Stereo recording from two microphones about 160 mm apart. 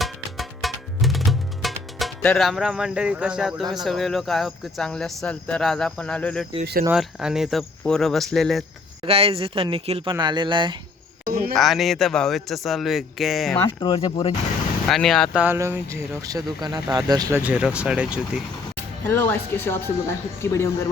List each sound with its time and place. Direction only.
0.0 s music: centre (ahead or behind)
3.8 s speech: centre (ahead or behind)
9.0 s speech: 35° right (ahead or behind)
11.3 s speech: 65° right (ahead or behind)
11.5 s speech: centre (ahead or behind)
13.6 s speech: 20° left (ahead or behind)
14.8 s speech: centre (ahead or behind)
15.5 s speech: 15° right (ahead or behind)
17.3 s speech: 10° right (ahead or behind)
19.0 s speech: 15° left (ahead or behind)